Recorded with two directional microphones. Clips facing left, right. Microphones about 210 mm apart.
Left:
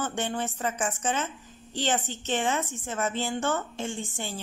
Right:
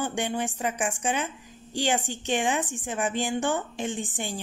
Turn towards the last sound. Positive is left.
turn(degrees=-15)  # may be behind; listen again after turning